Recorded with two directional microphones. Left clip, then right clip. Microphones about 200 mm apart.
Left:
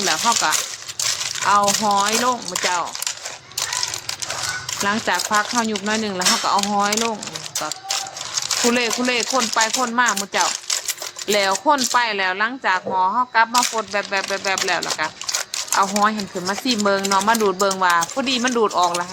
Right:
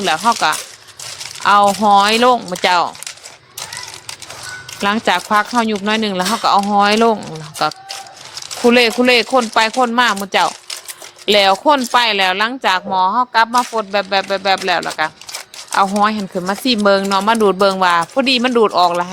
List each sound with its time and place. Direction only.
0.0 s speech: 45° right (ahead or behind)
4.8 s speech: 45° right (ahead or behind)
8.7 s speech: 45° right (ahead or behind)